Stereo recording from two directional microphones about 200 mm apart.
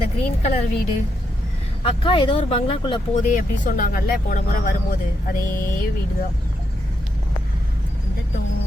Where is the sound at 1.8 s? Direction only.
25° left (ahead or behind); by 4.7 s 45° left (ahead or behind).